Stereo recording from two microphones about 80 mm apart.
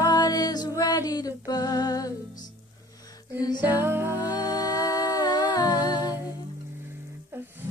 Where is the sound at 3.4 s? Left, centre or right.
Left.